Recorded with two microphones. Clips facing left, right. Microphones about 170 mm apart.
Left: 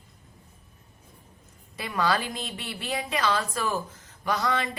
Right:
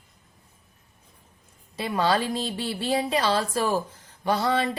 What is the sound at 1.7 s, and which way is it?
Speech, 30° right (ahead or behind).